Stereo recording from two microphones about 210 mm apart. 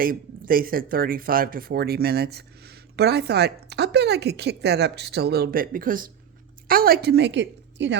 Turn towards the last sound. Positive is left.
turn(degrees=-55)  # may be behind; listen again after turning